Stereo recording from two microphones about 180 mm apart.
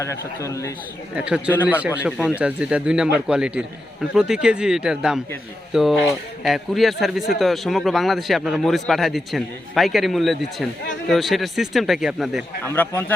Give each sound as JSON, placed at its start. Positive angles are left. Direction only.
{"t": 0.0, "sound": "a man's voice", "side_deg": 15}
{"t": 1.1, "sound": "a man's voice", "side_deg": -5}
{"t": 12.6, "sound": "a man's voice", "side_deg": 10}